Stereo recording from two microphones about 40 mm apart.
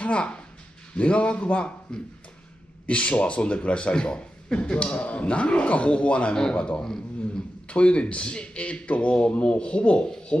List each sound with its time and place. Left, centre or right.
0.0 s a man's voice: left
1.9 s a man's voice: centre
2.9 s a man's voice: left